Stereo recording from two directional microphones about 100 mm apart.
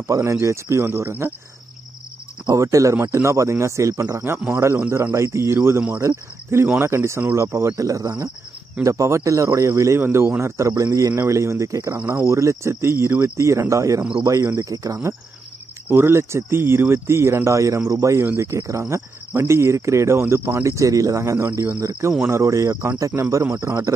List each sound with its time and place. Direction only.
0.0 s speech: 30° right (ahead or behind)
2.5 s speech: 30° right (ahead or behind)
11.9 s speech: 20° right (ahead or behind); by 15.0 s 35° right (ahead or behind)
15.9 s speech: 25° right (ahead or behind)
21.4 s speech: 20° right (ahead or behind)
22.2 s speech: 30° right (ahead or behind)